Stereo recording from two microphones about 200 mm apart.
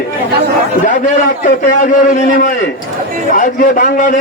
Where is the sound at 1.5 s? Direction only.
35° left (ahead or behind).